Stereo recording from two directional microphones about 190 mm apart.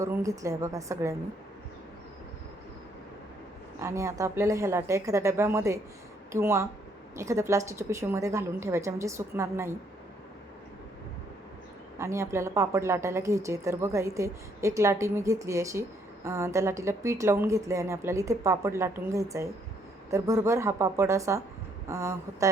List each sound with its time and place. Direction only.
0.0 s a woman's voice: 15° right (ahead or behind)
3.8 s a woman's voice: 15° right (ahead or behind)
11.9 s a woman's voice: 15° right (ahead or behind)